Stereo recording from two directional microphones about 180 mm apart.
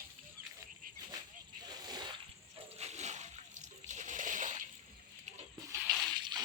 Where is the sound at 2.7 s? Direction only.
40° right (ahead or behind).